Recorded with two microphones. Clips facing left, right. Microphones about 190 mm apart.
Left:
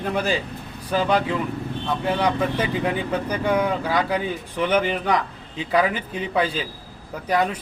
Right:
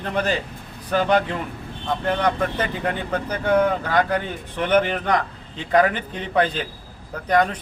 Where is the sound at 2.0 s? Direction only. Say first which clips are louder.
Even; 10° left (ahead or behind).